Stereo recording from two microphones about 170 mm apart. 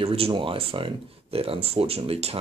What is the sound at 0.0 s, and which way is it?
Speech, 35° right (ahead or behind).